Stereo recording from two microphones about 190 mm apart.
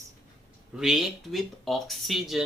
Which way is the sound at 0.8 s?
Centre (ahead or behind).